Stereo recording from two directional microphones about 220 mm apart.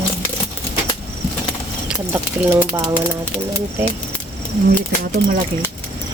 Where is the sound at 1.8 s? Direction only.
10° right (ahead or behind).